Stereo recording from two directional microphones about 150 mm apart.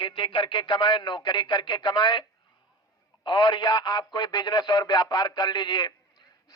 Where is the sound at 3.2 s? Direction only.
30° left (ahead or behind).